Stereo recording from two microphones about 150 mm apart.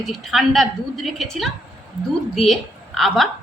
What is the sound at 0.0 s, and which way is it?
A woman's voice, centre (ahead or behind).